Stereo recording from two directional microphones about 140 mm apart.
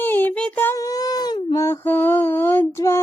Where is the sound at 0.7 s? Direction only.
25° left (ahead or behind).